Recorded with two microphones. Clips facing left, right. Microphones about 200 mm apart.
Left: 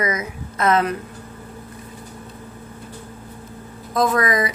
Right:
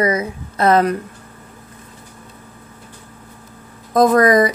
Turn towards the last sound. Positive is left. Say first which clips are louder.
# right 7 dB
turn(degrees=-45)  # may be behind; listen again after turning